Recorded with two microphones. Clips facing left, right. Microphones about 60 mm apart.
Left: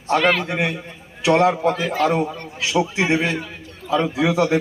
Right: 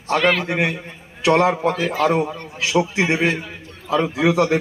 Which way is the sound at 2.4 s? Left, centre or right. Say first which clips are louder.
Right 1 dB; centre.